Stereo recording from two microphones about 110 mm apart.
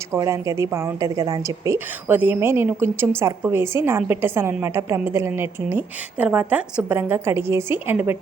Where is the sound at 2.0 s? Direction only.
15° right (ahead or behind).